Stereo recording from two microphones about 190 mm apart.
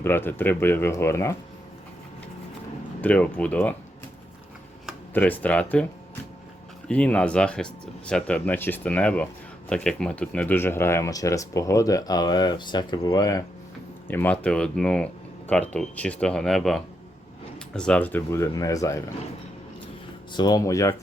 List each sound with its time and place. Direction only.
0.0 s speech: 10° left (ahead or behind)
3.0 s speech: 5° left (ahead or behind)
5.1 s speech: 10° left (ahead or behind)
6.8 s speech: 5° left (ahead or behind)
20.3 s speech: 20° left (ahead or behind)